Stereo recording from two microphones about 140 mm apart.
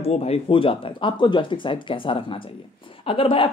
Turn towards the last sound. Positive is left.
turn(degrees=40)  # may be behind; listen again after turning